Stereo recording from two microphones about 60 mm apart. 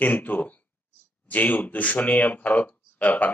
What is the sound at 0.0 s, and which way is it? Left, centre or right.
Speech, left.